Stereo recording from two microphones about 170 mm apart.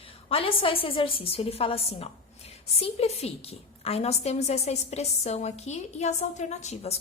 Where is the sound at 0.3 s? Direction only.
35° left (ahead or behind).